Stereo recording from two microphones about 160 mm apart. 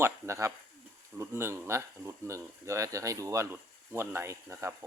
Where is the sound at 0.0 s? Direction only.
20° right (ahead or behind).